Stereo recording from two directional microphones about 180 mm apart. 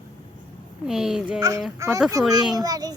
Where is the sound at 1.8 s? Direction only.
15° right (ahead or behind).